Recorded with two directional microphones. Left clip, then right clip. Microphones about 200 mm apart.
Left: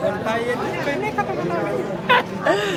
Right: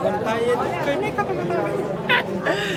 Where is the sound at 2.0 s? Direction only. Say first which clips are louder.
Left 4 dB; 10° left (ahead or behind).